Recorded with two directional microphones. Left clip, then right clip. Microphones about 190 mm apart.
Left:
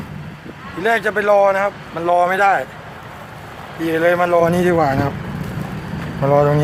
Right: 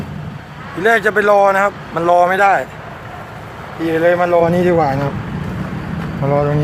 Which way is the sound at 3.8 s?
15° left (ahead or behind).